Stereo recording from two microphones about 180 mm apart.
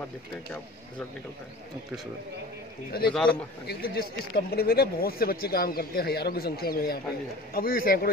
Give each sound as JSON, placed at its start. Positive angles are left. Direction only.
{"t": 3.1, "sound": "a man's voice", "side_deg": 5}
{"t": 3.6, "sound": "speech", "side_deg": 55}